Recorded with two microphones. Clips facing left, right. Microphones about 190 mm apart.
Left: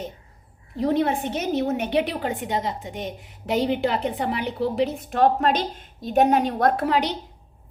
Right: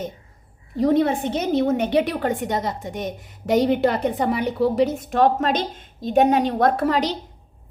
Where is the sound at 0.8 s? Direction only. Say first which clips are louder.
Right 3 dB; 50° right (ahead or behind).